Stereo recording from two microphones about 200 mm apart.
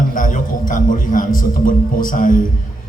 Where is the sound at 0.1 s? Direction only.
40° left (ahead or behind).